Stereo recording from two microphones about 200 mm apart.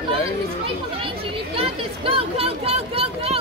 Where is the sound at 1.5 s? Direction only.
30° right (ahead or behind).